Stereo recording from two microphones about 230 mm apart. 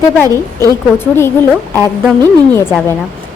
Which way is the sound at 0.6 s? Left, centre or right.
Centre.